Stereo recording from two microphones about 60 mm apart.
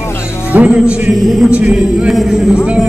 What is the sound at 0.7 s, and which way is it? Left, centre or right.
Speech, centre.